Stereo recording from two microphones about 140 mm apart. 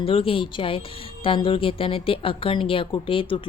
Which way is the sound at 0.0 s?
40° left (ahead or behind).